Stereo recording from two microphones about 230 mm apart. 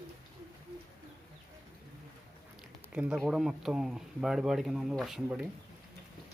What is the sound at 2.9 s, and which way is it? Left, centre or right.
Speech, centre.